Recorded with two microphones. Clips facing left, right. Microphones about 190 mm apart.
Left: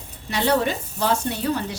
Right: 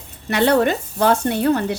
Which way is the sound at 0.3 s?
60° right (ahead or behind).